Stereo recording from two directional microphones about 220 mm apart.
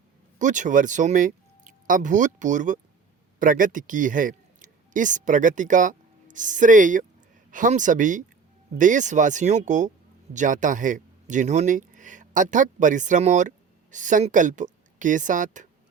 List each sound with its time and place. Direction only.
0.3 s speech: 35° right (ahead or behind)